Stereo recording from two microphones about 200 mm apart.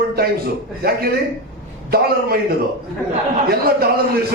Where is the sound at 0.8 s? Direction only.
50° right (ahead or behind).